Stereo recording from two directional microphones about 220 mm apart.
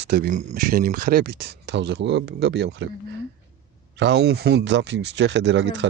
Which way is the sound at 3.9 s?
50° right (ahead or behind).